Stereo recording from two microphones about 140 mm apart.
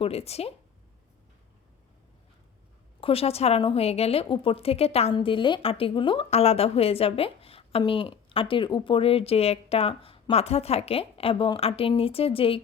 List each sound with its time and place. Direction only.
0.0 s a woman's voice: 45° left (ahead or behind)
3.0 s a woman's voice: 45° left (ahead or behind)
5.1 s a woman's voice: 35° left (ahead or behind)